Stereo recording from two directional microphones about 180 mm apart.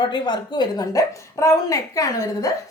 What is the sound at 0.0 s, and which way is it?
Speech, 25° left (ahead or behind).